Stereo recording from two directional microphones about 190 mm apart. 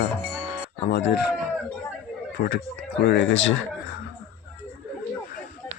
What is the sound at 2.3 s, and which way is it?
Speech, 50° left (ahead or behind).